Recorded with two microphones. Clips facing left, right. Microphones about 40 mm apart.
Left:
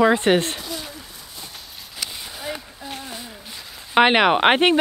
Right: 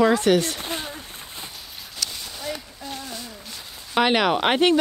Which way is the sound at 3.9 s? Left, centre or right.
Left.